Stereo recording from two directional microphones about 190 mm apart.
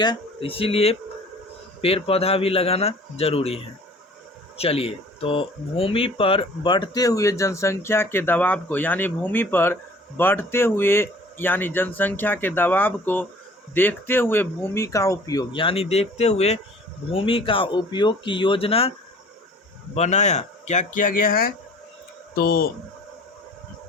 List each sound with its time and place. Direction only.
0.0 s speech: 25° left (ahead or behind); by 22.7 s 50° left (ahead or behind)